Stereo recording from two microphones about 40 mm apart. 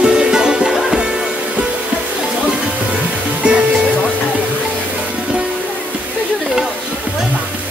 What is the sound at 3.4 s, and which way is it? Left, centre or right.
Music, right.